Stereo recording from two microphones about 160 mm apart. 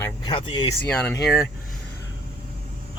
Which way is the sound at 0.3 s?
30° left (ahead or behind).